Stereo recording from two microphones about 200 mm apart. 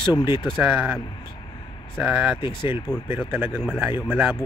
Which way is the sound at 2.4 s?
20° left (ahead or behind).